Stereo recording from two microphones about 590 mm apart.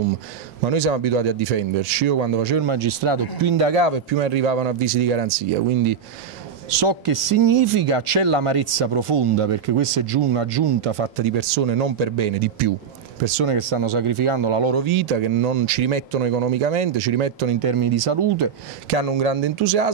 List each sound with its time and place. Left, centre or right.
0.7 s speech: right
2.7 s speech: right
3.4 s speech: right
6.7 s speech: right
13.2 s speech: right
18.9 s speech: right